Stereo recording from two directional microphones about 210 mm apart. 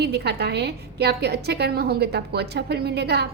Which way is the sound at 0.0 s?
50° right (ahead or behind).